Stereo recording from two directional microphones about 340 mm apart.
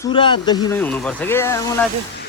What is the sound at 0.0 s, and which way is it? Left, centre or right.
Speech, centre.